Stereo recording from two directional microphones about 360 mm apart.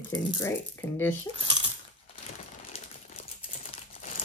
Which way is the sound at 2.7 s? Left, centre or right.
Centre.